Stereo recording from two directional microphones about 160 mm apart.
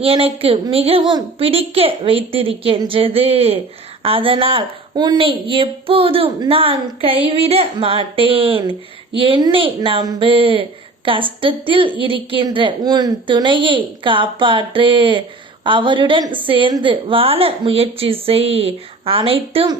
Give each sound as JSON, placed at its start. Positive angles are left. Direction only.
{"t": 0.0, "sound": "a woman's voice", "side_deg": -35}